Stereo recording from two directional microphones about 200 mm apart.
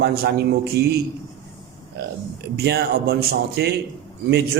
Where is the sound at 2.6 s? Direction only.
55° right (ahead or behind).